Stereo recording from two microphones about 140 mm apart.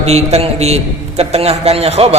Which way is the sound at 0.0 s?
50° right (ahead or behind).